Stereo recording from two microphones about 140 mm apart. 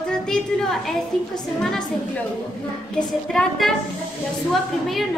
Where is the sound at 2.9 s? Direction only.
5° left (ahead or behind).